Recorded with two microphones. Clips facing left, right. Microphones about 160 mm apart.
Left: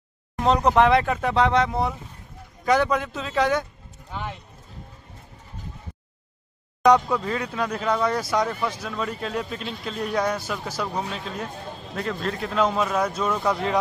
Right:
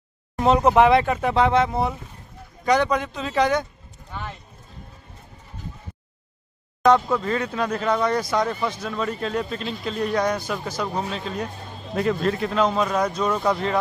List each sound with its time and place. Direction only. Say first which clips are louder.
0.4 s speech: right 2 dB; 5° right (ahead or behind)
4.1 s speech: left 2 dB; 15° left (ahead or behind)
7.1 s speech: right 2 dB; centre (ahead or behind)
11.9 s speech: right 6 dB; 10° right (ahead or behind); by 13.7 s 5° left (ahead or behind)